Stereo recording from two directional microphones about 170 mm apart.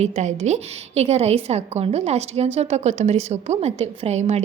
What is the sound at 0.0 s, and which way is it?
A woman's voice, 45° right (ahead or behind).